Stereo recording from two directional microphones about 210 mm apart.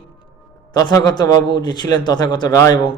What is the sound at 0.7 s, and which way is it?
A man's voice, 20° left (ahead or behind).